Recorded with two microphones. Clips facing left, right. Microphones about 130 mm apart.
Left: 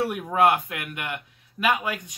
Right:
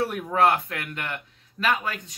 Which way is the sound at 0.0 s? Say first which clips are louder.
Left 1 dB; 15° left (ahead or behind).